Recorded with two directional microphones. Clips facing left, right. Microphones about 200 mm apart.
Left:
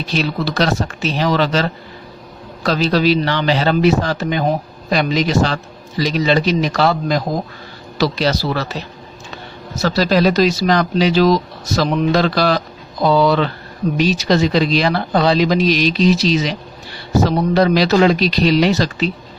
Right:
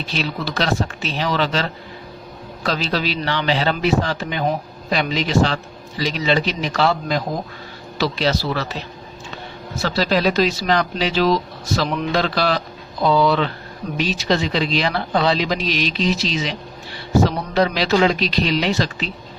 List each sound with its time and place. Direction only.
0.1 s a man's voice: 45° left (ahead or behind)
9.8 s speech: 40° left (ahead or behind)